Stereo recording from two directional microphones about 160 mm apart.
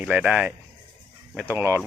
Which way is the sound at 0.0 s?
5° right (ahead or behind).